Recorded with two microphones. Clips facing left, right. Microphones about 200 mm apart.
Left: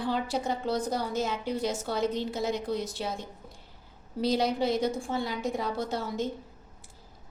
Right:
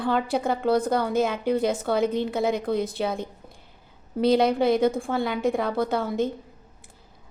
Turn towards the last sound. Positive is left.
turn(degrees=-55)  # may be behind; listen again after turning